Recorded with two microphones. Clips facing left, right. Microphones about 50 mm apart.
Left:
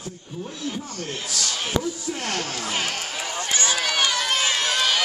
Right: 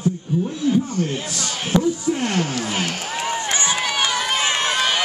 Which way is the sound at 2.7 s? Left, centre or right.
Centre.